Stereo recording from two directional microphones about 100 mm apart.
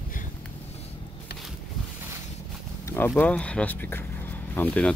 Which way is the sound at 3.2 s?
15° left (ahead or behind).